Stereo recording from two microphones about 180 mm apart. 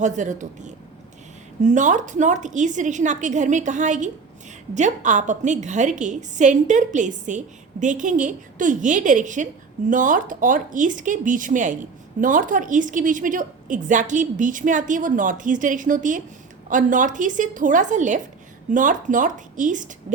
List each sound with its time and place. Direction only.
0.0 s a woman's voice: 40° right (ahead or behind)